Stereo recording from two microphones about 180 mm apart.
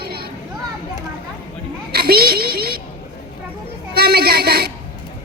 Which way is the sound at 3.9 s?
60° right (ahead or behind).